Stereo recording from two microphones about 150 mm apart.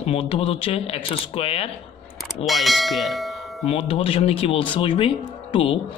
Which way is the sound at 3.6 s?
40° left (ahead or behind).